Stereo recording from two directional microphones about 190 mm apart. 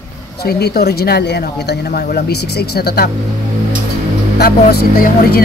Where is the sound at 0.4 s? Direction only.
55° left (ahead or behind).